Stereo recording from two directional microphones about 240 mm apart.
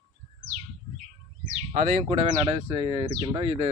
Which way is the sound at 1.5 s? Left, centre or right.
Right.